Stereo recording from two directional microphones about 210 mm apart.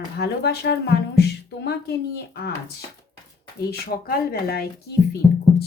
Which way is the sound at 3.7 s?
45° left (ahead or behind).